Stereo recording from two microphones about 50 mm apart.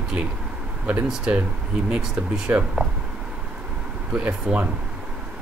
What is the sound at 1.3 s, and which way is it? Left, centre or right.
Speech, right.